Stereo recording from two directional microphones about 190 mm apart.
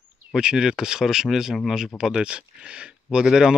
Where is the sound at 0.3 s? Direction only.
5° right (ahead or behind).